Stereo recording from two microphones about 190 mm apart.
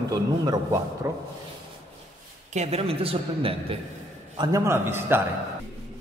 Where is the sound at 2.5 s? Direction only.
35° right (ahead or behind); by 5.2 s 10° right (ahead or behind).